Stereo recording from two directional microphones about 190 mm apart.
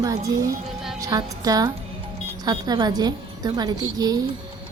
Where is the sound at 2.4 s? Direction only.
20° right (ahead or behind).